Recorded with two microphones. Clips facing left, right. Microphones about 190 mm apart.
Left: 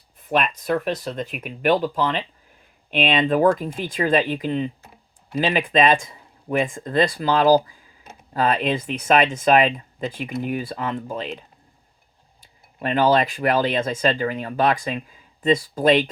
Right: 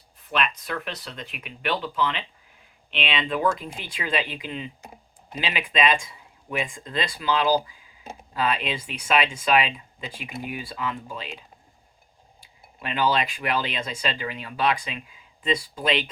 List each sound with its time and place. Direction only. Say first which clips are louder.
0.3 s speech: left 6 dB; 50° left (ahead or behind)
12.4 s speech: left 9 dB; 45° left (ahead or behind)